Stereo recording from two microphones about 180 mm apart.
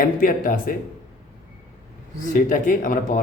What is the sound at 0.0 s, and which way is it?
Speech, 50° left (ahead or behind).